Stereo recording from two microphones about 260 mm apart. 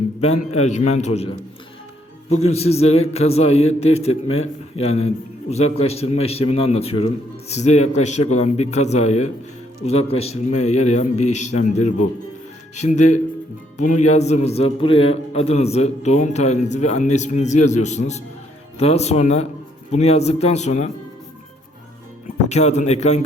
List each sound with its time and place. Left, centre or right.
0.2 s a man's voice: left
2.5 s a man's voice: left
22.4 s a man's voice: left